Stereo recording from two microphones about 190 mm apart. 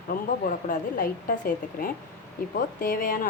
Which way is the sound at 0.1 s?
50° left (ahead or behind).